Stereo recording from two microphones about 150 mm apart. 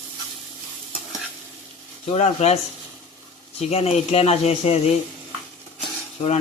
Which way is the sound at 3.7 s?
45° left (ahead or behind).